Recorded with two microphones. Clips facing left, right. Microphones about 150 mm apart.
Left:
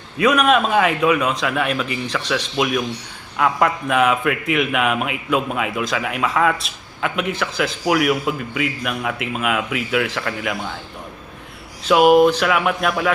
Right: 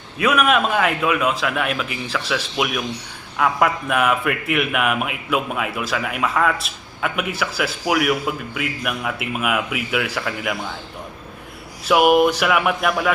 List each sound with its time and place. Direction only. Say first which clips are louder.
0.2 s a man's voice: left 2 dB; 5° right (ahead or behind)
11.8 s a man's voice: left 2 dB; 10° right (ahead or behind)